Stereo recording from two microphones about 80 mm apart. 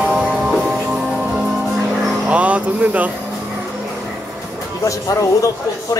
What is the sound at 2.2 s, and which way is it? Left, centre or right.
Music, centre.